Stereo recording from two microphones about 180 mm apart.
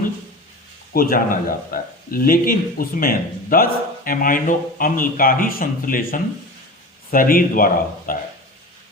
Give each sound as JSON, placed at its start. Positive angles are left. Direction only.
{"t": 0.9, "sound": "speech", "side_deg": 55}